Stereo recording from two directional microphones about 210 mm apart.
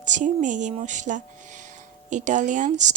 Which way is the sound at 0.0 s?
35° right (ahead or behind).